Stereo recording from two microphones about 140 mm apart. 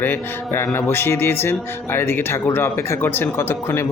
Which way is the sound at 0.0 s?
15° left (ahead or behind).